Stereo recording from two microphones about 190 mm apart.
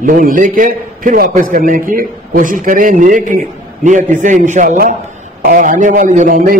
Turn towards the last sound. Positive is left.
turn(degrees=-45)  # may be behind; listen again after turning